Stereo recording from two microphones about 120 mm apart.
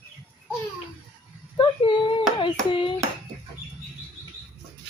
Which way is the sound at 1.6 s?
40° left (ahead or behind).